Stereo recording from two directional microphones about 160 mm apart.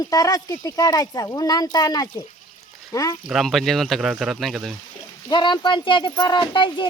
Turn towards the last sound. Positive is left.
turn(degrees=30)  # may be behind; listen again after turning